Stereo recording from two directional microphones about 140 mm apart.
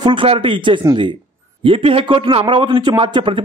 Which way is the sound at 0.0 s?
35° right (ahead or behind).